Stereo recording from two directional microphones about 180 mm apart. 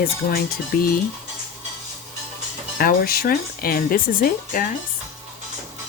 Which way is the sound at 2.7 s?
55° left (ahead or behind).